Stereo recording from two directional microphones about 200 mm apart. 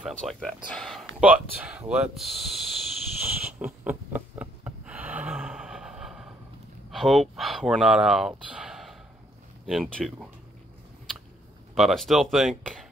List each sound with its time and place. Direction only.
0.0 s speech: centre (ahead or behind)
0.7 s a sound: centre (ahead or behind)
1.2 s snort: 5° right (ahead or behind)
6.9 s speech: centre (ahead or behind)
11.7 s speech: centre (ahead or behind)